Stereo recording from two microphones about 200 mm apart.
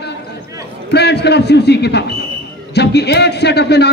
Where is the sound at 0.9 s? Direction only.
55° left (ahead or behind).